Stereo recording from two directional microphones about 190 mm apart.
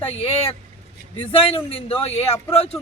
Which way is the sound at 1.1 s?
30° left (ahead or behind).